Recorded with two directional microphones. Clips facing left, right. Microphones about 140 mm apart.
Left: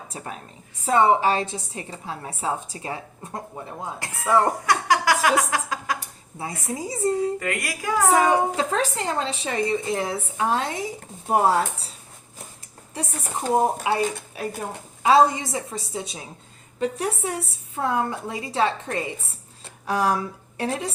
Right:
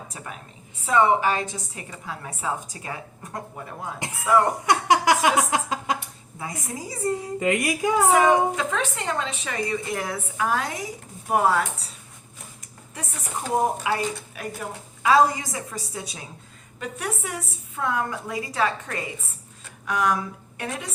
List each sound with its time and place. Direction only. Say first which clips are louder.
0.9 s a woman's voice: left 1 dB; 30° left (ahead or behind)
4.6 s a sound: right 1 dB; 20° right (ahead or behind)
6.7 s a woman's voice: left 3 dB; 25° left (ahead or behind)
7.3 s speech: right 5 dB; 20° right (ahead or behind)
8.1 s a woman's voice: left 1 dB; 35° left (ahead or behind)
12.9 s a woman's voice: left 3 dB; 30° left (ahead or behind)